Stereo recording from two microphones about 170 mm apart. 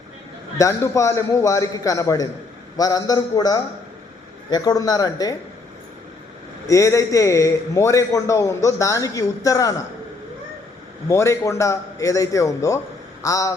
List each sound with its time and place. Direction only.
0.6 s a man's voice: 15° left (ahead or behind)
6.7 s a man's voice: 15° left (ahead or behind)
11.1 s a man's voice: 15° left (ahead or behind)